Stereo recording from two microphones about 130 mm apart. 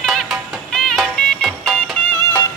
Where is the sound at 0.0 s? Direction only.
Centre (ahead or behind).